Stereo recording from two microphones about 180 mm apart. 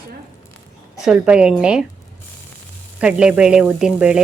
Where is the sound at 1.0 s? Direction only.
5° right (ahead or behind).